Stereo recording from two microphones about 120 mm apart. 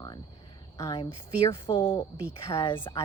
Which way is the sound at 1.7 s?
35° left (ahead or behind).